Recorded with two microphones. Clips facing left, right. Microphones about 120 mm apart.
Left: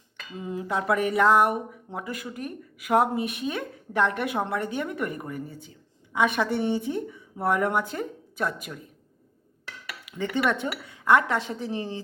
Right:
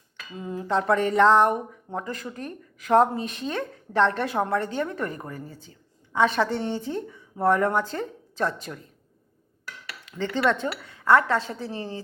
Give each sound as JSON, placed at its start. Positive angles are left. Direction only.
{"t": 0.3, "sound": "speech", "side_deg": 20}
{"t": 5.1, "sound": "speech", "side_deg": -30}
{"t": 5.5, "sound": "speech", "side_deg": 15}
{"t": 10.2, "sound": "speech", "side_deg": 15}